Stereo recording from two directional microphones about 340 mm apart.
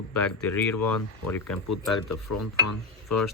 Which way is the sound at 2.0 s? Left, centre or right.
Left.